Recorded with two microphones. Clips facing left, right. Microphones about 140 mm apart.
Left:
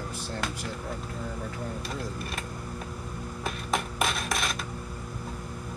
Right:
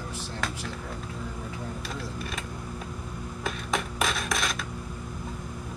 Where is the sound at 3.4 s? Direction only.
Centre (ahead or behind).